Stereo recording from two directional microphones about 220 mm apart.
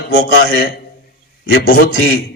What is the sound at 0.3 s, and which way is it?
Speech, 40° left (ahead or behind).